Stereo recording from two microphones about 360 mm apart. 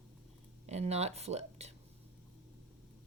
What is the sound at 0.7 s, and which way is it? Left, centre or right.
Speech, centre.